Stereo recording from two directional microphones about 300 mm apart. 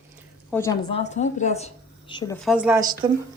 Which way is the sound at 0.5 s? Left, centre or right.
Centre.